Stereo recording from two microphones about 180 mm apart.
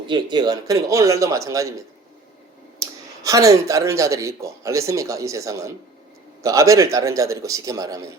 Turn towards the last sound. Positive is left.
turn(degrees=-20)  # may be behind; listen again after turning